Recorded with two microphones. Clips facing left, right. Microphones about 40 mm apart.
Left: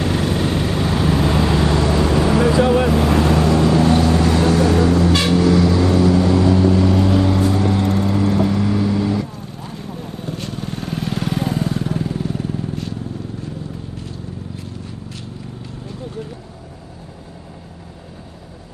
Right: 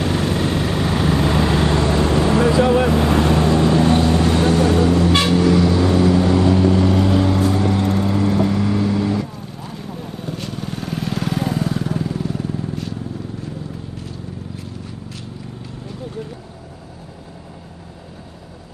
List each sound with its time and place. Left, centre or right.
0.3 s vehicle: right
0.7 s vehicle: right
0.9 s vehicle: centre; by 2.9 s right
2.9 s vehicle: centre
3.3 s vehicle: right
7.6 s vehicle: centre
10.9 s vehicle: left
11.2 s vehicle: right
11.9 s vehicle: left